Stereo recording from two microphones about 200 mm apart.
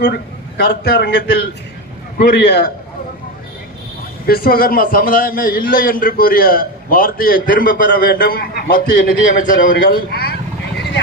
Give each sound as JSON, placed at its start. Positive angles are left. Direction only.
{"t": 0.0, "sound": "a man's voice", "side_deg": 55}
{"t": 4.3, "sound": "a man's voice", "side_deg": 45}